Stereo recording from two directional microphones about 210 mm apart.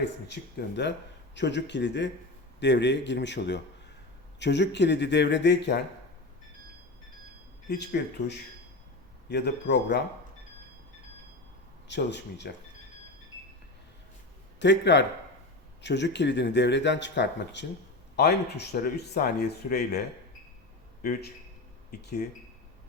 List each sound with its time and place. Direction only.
0.8 s speech: 55° left (ahead or behind)
8.0 s speech: 55° left (ahead or behind)
9.3 s speech: 55° left (ahead or behind)
11.9 s speech: 55° left (ahead or behind)
14.6 s speech: 55° left (ahead or behind)
21.0 s speech: 45° left (ahead or behind)